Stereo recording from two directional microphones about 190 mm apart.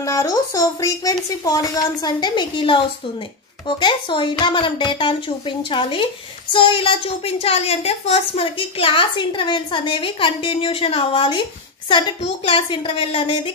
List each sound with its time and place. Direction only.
0.0 s a woman's voice: 20° left (ahead or behind)